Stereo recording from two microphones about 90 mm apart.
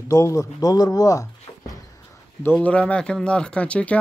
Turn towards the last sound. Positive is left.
turn(degrees=15)  # may be behind; listen again after turning